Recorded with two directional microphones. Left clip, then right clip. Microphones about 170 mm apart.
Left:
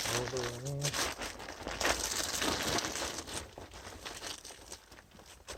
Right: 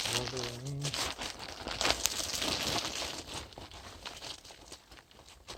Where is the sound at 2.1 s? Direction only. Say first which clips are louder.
Even; 15° left (ahead or behind).